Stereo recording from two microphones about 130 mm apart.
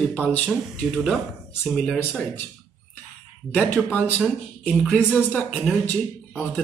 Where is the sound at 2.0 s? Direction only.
15° left (ahead or behind).